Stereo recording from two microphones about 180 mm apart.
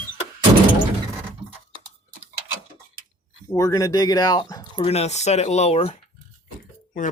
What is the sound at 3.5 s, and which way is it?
Speech, 20° left (ahead or behind).